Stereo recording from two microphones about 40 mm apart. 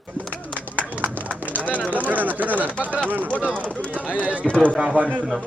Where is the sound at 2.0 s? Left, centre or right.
Right.